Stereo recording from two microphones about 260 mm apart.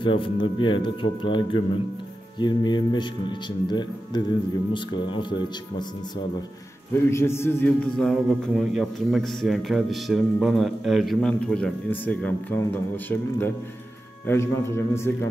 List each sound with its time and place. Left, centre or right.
0.0 s speech: centre
7.1 s a man's voice: centre